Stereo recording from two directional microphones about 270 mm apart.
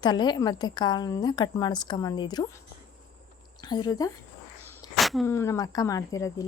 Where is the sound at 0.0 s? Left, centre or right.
Centre.